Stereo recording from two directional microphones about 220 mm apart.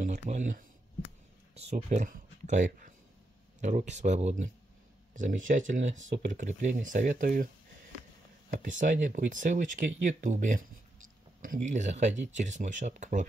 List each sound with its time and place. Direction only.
0.0 s speech: 35° right (ahead or behind)
8.6 s speech: 35° right (ahead or behind)